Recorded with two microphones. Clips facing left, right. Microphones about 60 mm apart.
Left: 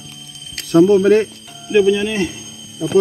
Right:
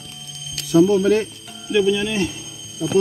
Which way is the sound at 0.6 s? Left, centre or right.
Left.